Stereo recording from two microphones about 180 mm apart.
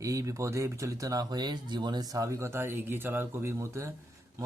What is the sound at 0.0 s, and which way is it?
Speech, 20° right (ahead or behind).